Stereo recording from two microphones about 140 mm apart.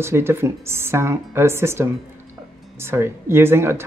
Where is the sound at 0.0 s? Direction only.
15° right (ahead or behind).